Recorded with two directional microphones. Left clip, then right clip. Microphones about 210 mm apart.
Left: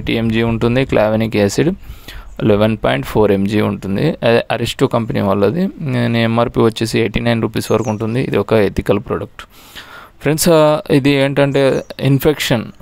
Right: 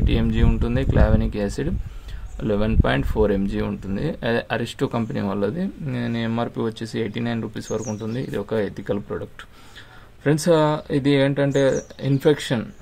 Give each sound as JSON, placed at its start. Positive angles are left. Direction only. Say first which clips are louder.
{"t": 0.0, "sound": "speech", "louder": "left 8 dB", "side_deg": 35}
{"t": 10.2, "sound": "speech", "louder": "left 7 dB", "side_deg": 40}